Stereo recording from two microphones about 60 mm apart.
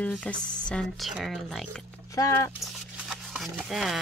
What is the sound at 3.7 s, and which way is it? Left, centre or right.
Speech, centre.